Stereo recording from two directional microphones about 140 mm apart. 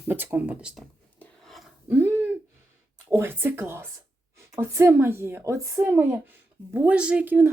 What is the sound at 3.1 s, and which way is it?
A woman's voice, 15° right (ahead or behind).